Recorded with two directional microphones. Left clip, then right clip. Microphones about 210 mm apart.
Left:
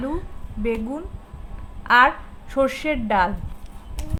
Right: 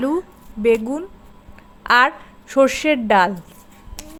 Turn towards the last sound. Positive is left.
turn(degrees=-35)  # may be behind; listen again after turning